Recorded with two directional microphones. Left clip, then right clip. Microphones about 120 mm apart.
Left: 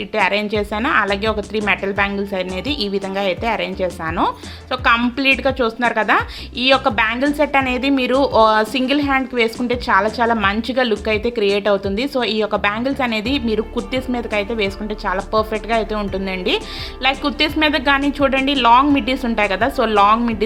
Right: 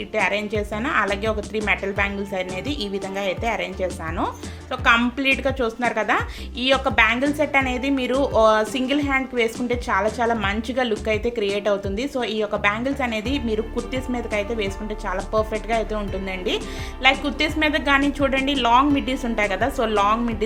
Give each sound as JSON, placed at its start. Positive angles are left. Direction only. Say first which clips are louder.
{"t": 0.1, "sound": "speech", "louder": "left 5 dB", "side_deg": 30}